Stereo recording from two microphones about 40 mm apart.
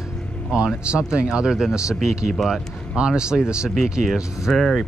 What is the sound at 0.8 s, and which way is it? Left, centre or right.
Speech, right.